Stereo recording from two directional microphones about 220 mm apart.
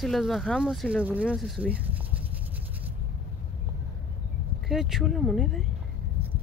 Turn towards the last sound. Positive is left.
turn(degrees=0)  # may be behind; listen again after turning